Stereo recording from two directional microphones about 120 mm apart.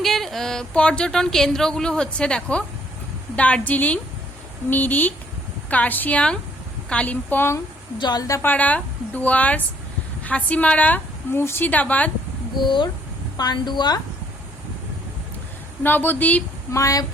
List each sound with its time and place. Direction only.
0.0 s a woman's voice: centre (ahead or behind); by 7.6 s 20° left (ahead or behind)
7.9 s a woman's voice: 35° left (ahead or behind)
8.4 s a woman's voice: 15° left (ahead or behind)
12.5 s a woman's voice: 40° left (ahead or behind)
15.8 s a woman's voice: 15° left (ahead or behind)
16.7 s a woman's voice: 25° left (ahead or behind)